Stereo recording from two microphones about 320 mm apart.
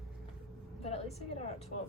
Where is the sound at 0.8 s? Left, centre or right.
Centre.